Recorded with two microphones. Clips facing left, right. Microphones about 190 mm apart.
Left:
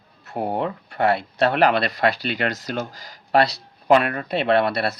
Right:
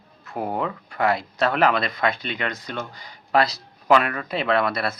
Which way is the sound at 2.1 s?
80° left.